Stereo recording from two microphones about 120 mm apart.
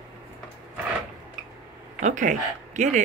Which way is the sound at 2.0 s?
90° right.